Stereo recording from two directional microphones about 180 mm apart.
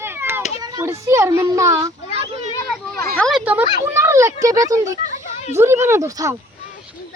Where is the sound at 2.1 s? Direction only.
35° right (ahead or behind).